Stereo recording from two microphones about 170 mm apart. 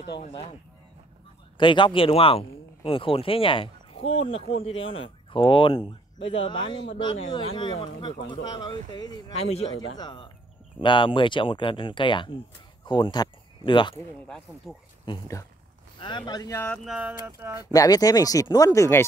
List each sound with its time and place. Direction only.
1.6 s speech: 30° left (ahead or behind)
14.2 s speech: 5° left (ahead or behind)
15.0 s speech: 20° left (ahead or behind)
16.5 s speech: 10° left (ahead or behind)
16.8 s speech: 5° right (ahead or behind)
17.7 s speech: 20° left (ahead or behind)